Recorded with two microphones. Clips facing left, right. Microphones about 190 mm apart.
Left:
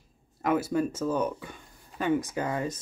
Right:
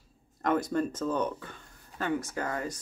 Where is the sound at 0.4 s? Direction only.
5° left (ahead or behind).